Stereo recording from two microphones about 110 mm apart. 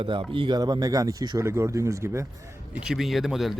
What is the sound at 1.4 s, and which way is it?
Speech, 25° right (ahead or behind).